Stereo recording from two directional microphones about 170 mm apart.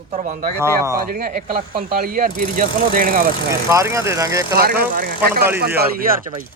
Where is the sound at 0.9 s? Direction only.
65° right (ahead or behind).